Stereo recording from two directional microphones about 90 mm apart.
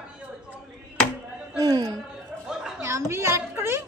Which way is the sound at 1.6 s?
45° right (ahead or behind).